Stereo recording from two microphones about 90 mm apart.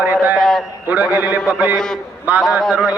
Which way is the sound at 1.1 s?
20° right (ahead or behind).